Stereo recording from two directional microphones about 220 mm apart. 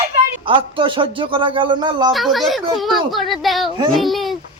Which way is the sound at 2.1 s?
Centre (ahead or behind).